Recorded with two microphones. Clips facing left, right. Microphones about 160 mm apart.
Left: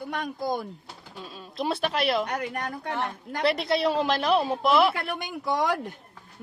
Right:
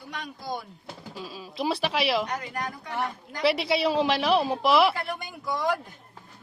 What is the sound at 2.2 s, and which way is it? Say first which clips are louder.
Speech: left 2 dB; 65° left (ahead or behind).